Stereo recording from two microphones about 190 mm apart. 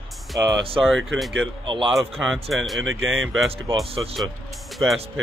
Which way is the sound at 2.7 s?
90° right.